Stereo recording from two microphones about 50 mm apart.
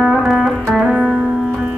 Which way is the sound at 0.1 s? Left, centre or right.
Centre.